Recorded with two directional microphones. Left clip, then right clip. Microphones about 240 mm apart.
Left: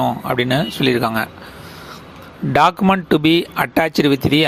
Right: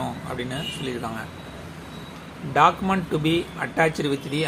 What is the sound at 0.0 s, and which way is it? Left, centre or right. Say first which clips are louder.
Speech: left 12 dB; left.